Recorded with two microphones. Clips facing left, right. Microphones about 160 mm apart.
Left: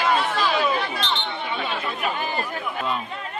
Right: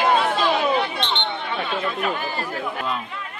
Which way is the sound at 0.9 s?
25° right (ahead or behind).